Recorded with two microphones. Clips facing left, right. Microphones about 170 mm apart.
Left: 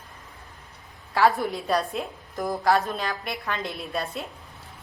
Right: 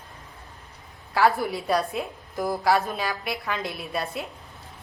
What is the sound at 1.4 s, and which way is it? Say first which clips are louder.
A woman's voice: right 1 dB; centre (ahead or behind).